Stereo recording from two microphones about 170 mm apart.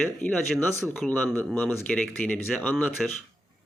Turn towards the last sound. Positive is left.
turn(degrees=10)  # may be behind; listen again after turning